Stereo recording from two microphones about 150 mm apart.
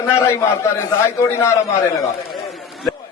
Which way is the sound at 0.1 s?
15° left (ahead or behind).